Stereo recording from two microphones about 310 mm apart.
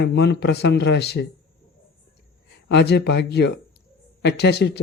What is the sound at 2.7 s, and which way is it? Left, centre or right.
Speech, left.